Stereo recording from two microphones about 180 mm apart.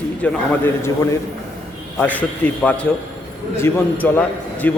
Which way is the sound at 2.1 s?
10° left (ahead or behind).